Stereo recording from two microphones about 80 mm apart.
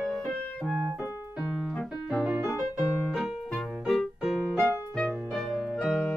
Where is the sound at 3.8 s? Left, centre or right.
Centre.